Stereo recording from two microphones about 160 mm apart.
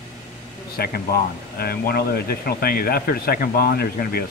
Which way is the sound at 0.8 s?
75° left (ahead or behind).